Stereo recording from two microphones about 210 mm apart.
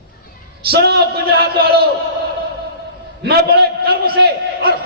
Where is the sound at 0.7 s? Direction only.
50° right (ahead or behind).